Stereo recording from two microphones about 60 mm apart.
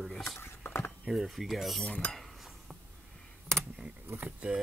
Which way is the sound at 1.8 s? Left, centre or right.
Left.